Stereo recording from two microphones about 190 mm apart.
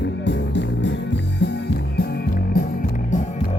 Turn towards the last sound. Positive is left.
turn(degrees=40)  # may be behind; listen again after turning